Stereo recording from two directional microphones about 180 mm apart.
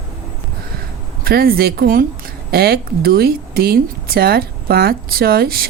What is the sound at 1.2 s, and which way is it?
Speech, 55° right (ahead or behind).